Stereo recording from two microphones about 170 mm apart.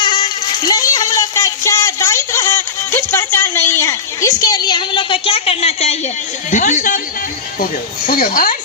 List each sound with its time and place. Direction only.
0.0 s a sound: 25° left (ahead or behind)
6.5 s speech: 45° left (ahead or behind)
8.0 s speech: 55° left (ahead or behind)